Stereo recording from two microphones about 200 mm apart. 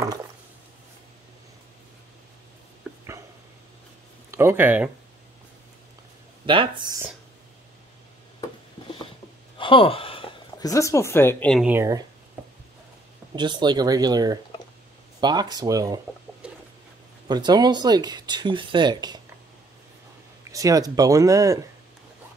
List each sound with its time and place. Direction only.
4.3 s speech: 10° right (ahead or behind)
6.4 s speech: 25° right (ahead or behind)
9.6 s speech: 25° left (ahead or behind); by 11.6 s 5° left (ahead or behind)
11.6 s speech: 15° right (ahead or behind)
13.4 s speech: 20° right (ahead or behind)
17.3 s speech: 20° right (ahead or behind)
20.4 s speech: 15° right (ahead or behind)